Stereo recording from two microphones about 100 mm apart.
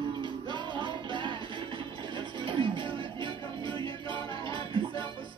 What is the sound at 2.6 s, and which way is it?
Music, 60° right (ahead or behind).